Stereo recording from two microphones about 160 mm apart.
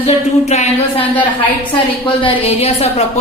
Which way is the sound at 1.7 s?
30° left (ahead or behind).